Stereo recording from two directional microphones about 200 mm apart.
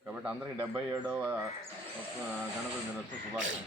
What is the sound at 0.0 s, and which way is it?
A man's voice, 5° right (ahead or behind).